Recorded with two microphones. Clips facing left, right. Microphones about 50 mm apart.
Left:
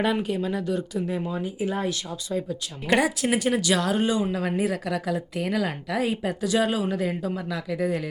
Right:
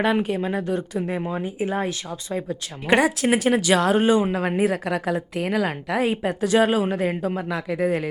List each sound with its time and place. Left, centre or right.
0.0 s speech: right
5.4 s speech: right